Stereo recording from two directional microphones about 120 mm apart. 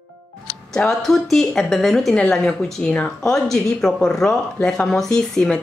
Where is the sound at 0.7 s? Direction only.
5° left (ahead or behind).